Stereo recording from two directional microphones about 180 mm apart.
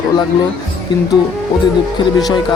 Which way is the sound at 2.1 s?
20° left (ahead or behind).